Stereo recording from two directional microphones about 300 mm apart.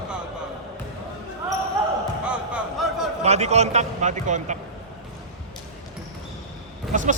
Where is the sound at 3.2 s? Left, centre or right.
Right.